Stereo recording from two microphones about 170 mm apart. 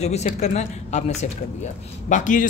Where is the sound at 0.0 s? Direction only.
40° left (ahead or behind).